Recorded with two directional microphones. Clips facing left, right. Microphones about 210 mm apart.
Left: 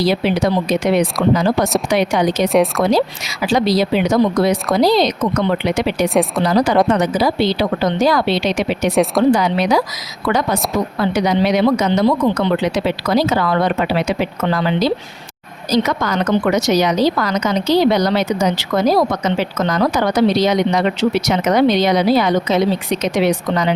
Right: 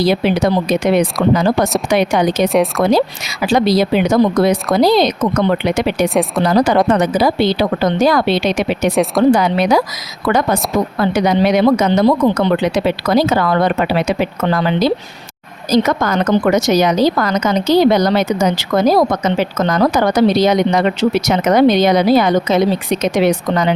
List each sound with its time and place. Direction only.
0.0 s a woman's voice: 50° right (ahead or behind)
2.5 s speech: centre (ahead or behind)
2.9 s a woman's voice: 50° right (ahead or behind)
10.9 s a woman's voice: 50° right (ahead or behind)